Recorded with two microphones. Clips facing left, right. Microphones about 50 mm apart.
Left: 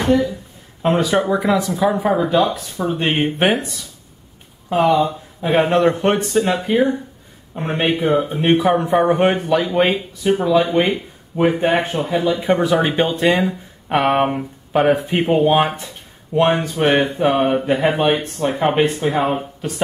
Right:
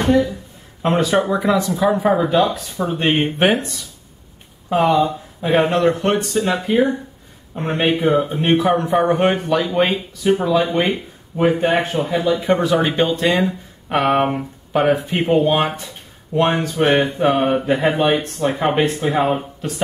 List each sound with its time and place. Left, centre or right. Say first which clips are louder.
0.0 s speech: even; centre
4.6 s speech: even; centre